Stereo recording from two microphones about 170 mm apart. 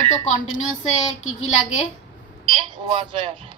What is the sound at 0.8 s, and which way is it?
Speech, 40° left (ahead or behind).